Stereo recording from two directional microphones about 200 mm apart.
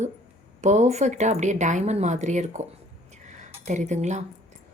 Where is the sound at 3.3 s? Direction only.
35° right (ahead or behind).